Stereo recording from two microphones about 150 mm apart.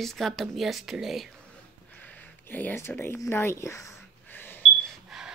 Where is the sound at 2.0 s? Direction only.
10° left (ahead or behind).